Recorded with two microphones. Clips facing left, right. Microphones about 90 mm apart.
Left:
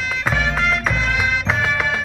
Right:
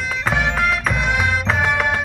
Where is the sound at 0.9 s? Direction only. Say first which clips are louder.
Right 1 dB; 10° right (ahead or behind).